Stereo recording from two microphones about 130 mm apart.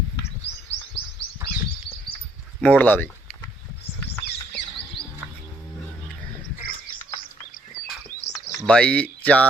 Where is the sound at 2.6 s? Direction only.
15° left (ahead or behind).